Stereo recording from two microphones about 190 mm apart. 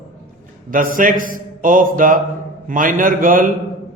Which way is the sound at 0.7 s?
45° right (ahead or behind).